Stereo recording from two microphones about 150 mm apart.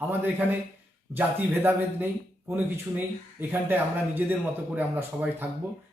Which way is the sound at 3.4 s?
10° right (ahead or behind).